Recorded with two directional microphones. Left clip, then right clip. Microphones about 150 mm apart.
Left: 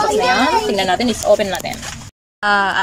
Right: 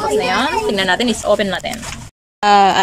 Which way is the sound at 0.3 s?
5° left (ahead or behind).